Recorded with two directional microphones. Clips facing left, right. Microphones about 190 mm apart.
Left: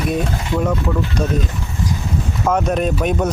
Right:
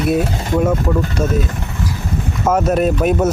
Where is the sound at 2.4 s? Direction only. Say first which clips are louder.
Right 3 dB; 5° right (ahead or behind).